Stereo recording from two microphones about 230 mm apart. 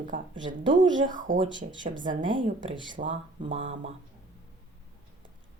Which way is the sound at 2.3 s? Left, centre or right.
Right.